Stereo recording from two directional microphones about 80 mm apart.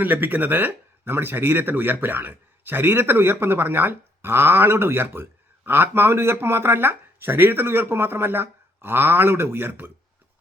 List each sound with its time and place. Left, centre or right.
0.0 s a man's voice: right